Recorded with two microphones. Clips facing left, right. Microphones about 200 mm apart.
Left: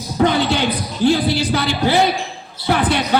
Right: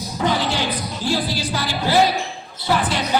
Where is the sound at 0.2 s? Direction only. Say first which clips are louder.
Left 5 dB; 60° left (ahead or behind).